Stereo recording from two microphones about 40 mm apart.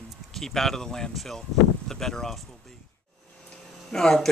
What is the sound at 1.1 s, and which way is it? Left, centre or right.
Speech, centre.